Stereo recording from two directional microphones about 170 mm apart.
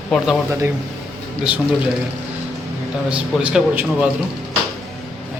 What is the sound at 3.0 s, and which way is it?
A man's voice, 5° right (ahead or behind).